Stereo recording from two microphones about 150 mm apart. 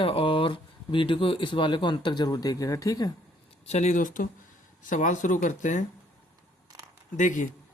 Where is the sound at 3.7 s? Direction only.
50° left (ahead or behind).